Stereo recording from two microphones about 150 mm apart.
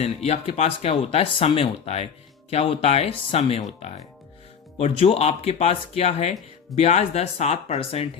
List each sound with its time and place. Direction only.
0.0 s speech: 45° left (ahead or behind)